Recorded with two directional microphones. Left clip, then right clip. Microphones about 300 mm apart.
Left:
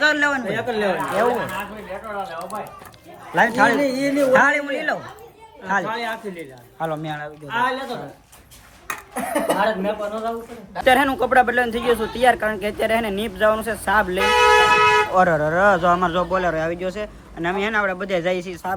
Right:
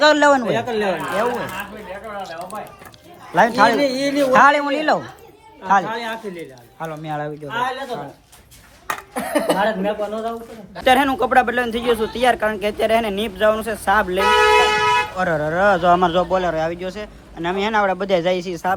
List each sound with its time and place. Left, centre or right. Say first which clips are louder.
0.0 s speech: right 5 dB; centre
7.2 s speech: even; centre
9.1 s speech: right 1 dB; right
10.8 s speech: right 1 dB; centre